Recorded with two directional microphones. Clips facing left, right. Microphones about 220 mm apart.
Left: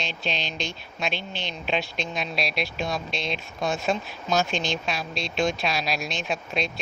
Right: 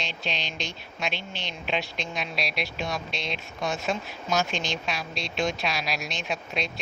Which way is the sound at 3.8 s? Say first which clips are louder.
Left 3 dB; 30° left (ahead or behind).